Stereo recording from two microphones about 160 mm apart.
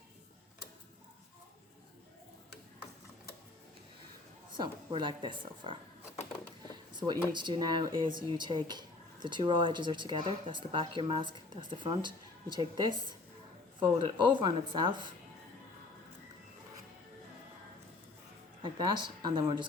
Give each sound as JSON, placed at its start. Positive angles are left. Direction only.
{"t": 4.5, "sound": "speech", "side_deg": -30}
{"t": 6.9, "sound": "speech", "side_deg": -30}
{"t": 18.6, "sound": "speech", "side_deg": -30}